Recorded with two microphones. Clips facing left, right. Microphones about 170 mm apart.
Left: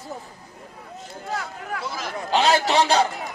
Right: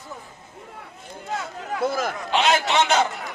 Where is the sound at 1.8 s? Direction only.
50° right (ahead or behind).